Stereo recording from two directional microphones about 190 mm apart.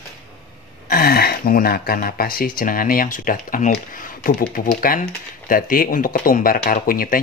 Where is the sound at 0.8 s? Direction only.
55° left (ahead or behind).